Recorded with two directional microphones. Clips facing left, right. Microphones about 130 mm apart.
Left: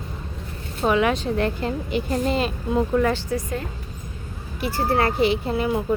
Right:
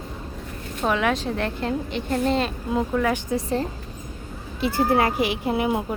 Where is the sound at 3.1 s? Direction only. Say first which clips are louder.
Right 2 dB; 25° right (ahead or behind).